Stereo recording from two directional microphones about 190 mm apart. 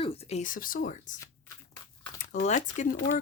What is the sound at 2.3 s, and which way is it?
Speech, 40° left (ahead or behind).